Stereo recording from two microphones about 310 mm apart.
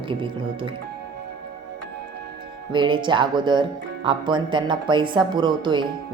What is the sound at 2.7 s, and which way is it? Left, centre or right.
Speech, centre.